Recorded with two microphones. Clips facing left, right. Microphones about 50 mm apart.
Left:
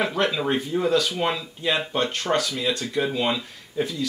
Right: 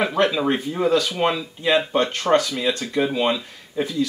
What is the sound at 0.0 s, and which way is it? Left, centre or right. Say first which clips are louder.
Speech: right 4 dB; right.